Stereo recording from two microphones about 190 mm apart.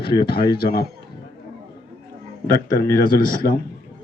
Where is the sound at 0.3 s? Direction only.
55° left (ahead or behind).